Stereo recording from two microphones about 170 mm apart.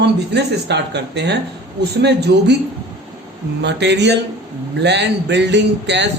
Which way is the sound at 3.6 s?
90° right.